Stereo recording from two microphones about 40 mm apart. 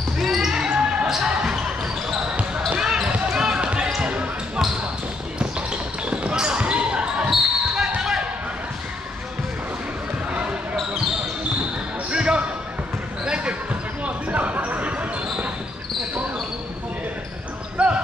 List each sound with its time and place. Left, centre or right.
0.2 s basketball bounce: centre
2.8 s a sound: centre
3.3 s basketball bounce: centre
3.5 s basketball bounce: right
5.4 s basketball bounce: right
7.2 s a sound: centre
10.3 s basketball bounce: right
12.1 s basketball bounce: right
14.0 s basketball bounce: right
17.7 s basketball bounce: right